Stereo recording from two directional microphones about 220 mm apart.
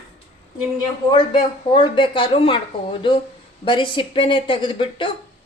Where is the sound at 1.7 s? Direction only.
25° left (ahead or behind).